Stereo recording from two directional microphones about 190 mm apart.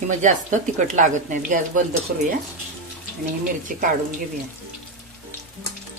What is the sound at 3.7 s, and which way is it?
Speech, 45° right (ahead or behind).